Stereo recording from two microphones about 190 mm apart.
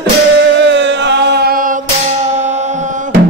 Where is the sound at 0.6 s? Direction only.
70° right (ahead or behind); by 1.8 s 45° right (ahead or behind).